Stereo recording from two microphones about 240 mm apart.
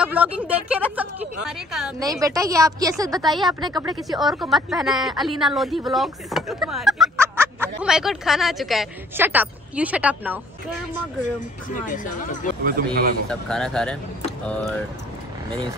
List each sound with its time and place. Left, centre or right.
0.0 s a woman's voice: centre
2.0 s a woman's voice: centre
3.3 s a woman's voice: centre
3.6 s a woman's voice: centre
4.2 s a woman's voice: centre
11.7 s speech: left
12.6 s speech: right
13.3 s a woman's voice: centre